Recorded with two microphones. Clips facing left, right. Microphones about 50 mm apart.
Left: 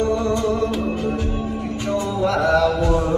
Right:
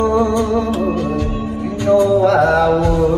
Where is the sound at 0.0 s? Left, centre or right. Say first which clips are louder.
Right 5 dB; right.